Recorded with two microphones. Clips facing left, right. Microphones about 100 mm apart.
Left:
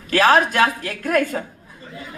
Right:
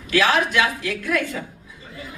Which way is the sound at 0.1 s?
45° left (ahead or behind).